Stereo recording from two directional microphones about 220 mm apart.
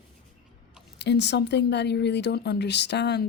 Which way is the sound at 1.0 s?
50° left (ahead or behind).